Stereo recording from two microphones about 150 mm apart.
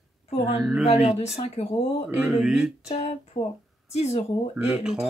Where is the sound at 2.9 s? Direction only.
40° left (ahead or behind).